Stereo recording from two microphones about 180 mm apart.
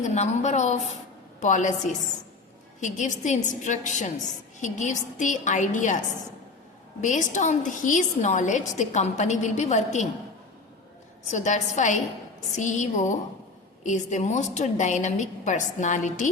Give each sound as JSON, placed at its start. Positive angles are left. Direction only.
{"t": 0.0, "sound": "a woman's voice", "side_deg": 40}
{"t": 7.0, "sound": "a woman's voice", "side_deg": 45}
{"t": 11.3, "sound": "a woman's voice", "side_deg": 40}